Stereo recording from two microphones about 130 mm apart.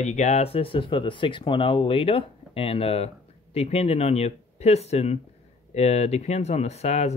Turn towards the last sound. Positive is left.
turn(degrees=55)  # may be behind; listen again after turning